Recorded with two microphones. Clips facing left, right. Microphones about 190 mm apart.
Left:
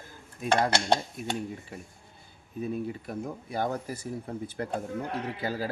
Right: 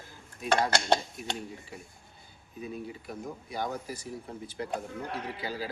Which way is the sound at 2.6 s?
50° left (ahead or behind).